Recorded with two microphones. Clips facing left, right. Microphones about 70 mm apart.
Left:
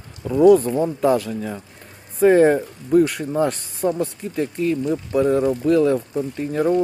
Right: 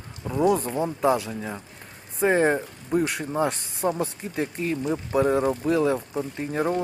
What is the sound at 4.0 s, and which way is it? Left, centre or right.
Speech, right.